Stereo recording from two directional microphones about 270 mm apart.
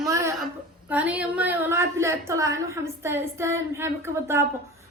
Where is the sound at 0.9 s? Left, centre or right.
Centre.